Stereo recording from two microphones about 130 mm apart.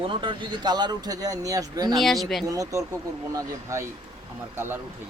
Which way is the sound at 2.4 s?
25° right (ahead or behind).